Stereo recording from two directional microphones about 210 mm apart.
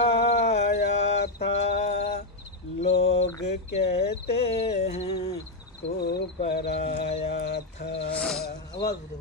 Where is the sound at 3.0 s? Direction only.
30° left (ahead or behind).